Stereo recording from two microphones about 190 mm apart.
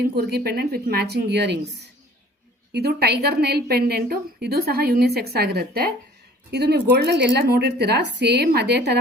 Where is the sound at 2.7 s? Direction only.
60° right (ahead or behind).